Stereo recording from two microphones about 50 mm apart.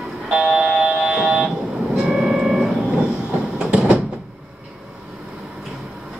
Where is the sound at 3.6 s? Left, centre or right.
Right.